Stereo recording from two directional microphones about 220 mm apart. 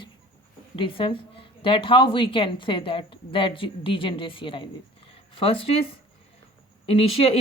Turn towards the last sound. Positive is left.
turn(degrees=25)  # may be behind; listen again after turning